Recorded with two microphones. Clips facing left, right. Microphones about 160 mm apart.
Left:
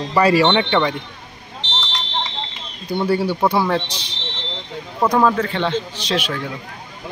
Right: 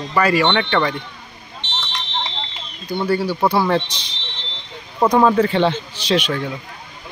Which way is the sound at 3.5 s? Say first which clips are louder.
Right 1 dB; centre (ahead or behind).